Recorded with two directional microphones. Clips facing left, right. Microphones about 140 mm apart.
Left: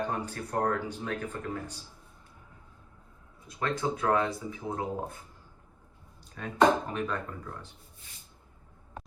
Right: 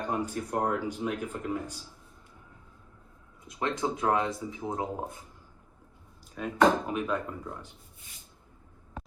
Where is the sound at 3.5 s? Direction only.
20° right (ahead or behind).